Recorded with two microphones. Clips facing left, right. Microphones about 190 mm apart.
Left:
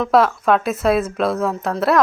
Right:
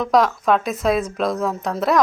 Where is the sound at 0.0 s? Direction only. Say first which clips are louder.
Left 2 dB; centre (ahead or behind).